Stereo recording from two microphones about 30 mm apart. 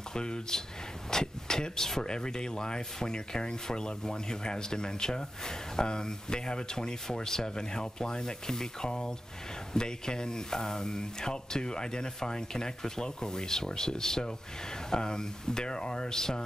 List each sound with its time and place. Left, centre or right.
0.1 s speech: left